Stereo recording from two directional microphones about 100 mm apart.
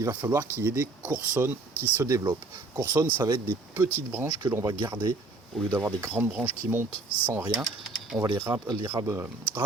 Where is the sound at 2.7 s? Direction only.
40° right (ahead or behind).